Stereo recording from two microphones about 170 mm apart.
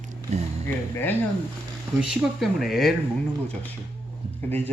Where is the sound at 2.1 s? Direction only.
Centre (ahead or behind).